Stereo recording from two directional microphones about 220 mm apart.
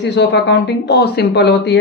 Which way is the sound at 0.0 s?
50° left (ahead or behind).